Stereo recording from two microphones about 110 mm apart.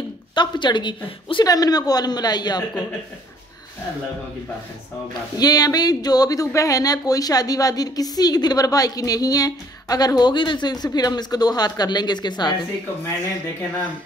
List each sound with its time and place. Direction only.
0.3 s a woman's voice: 45° left (ahead or behind)
1.4 s speech: 35° left (ahead or behind)
5.4 s speech: 35° left (ahead or behind)